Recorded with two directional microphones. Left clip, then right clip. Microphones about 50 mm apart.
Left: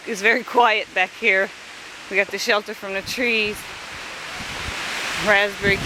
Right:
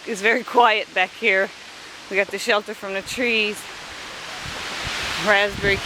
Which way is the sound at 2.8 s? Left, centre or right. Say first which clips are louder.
Left 1 dB; centre.